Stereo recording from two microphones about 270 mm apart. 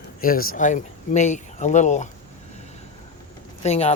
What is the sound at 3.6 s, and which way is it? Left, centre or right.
Speech, left.